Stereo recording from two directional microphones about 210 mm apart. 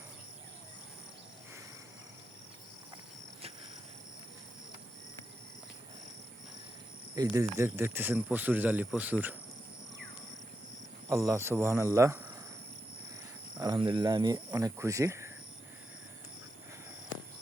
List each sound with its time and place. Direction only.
7.2 s speech: 15° right (ahead or behind)
11.1 s speech: 15° right (ahead or behind)
13.6 s speech: 20° right (ahead or behind)